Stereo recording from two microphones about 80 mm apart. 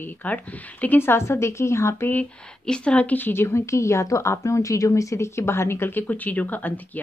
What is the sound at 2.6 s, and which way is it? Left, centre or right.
A woman's voice, centre.